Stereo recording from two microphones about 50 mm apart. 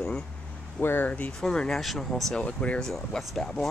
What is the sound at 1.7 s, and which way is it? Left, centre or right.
Speech, centre.